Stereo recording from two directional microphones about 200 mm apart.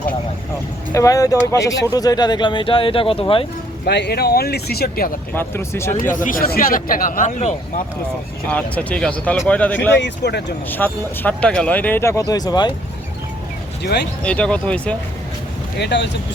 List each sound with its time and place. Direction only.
0.9 s speech: 15° left (ahead or behind)
3.8 s a man's voice: 55° left (ahead or behind)
5.3 s speech: 10° left (ahead or behind)
5.9 s a man's voice: 40° left (ahead or behind)
8.4 s speech: 5° left (ahead or behind)
10.0 s speech: 55° left (ahead or behind)
10.7 s speech: 10° left (ahead or behind)
13.8 s speech: 55° left (ahead or behind)
14.2 s speech: 5° left (ahead or behind)
15.8 s speech: 60° left (ahead or behind)